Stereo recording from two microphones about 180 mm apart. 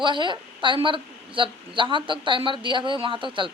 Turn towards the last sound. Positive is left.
turn(degrees=-25)  # may be behind; listen again after turning